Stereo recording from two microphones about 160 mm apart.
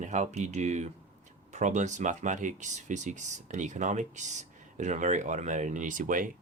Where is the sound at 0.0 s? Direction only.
50° right (ahead or behind).